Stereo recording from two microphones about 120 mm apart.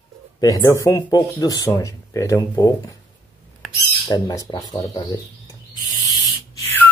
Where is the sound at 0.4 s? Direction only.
30° left (ahead or behind).